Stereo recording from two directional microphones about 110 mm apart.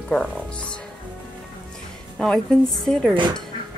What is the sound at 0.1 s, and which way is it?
Speech, 10° left (ahead or behind).